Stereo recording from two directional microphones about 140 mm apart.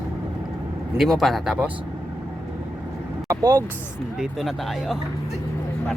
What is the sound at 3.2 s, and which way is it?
Speech, 25° right (ahead or behind).